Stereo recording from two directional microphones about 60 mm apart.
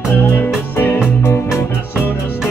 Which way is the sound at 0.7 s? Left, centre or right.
Left.